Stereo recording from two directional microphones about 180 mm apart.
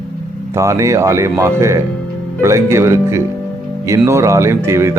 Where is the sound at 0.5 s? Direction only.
15° right (ahead or behind).